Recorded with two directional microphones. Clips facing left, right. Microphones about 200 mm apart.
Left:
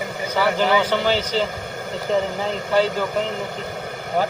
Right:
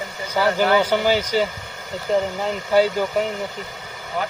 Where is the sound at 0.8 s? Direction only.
10° right (ahead or behind).